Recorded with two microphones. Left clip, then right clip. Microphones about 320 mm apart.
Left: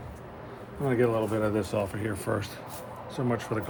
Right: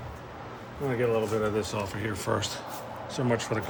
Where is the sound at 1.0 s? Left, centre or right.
Left.